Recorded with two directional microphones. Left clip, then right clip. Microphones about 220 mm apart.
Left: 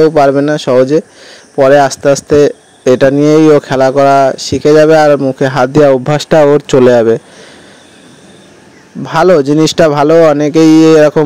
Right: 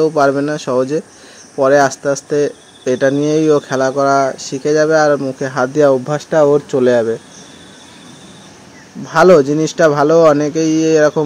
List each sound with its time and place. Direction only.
0.0 s speech: 35° left (ahead or behind)
9.0 s speech: 40° left (ahead or behind)